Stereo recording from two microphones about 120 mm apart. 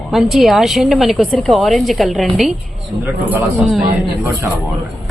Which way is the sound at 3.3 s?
10° right (ahead or behind).